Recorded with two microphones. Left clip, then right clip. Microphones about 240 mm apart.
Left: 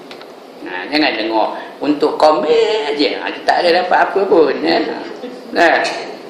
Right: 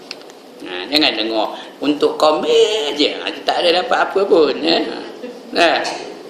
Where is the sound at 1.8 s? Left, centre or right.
Right.